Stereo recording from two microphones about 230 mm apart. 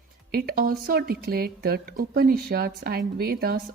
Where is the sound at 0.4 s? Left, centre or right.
Right.